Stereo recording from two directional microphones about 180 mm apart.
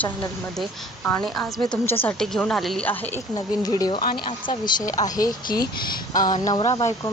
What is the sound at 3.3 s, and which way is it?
Speech, 20° left (ahead or behind).